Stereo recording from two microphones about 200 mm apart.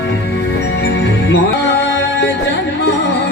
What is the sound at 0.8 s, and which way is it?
Music, 60° left (ahead or behind).